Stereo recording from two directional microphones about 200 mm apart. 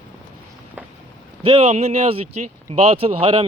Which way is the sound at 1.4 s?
30° right (ahead or behind).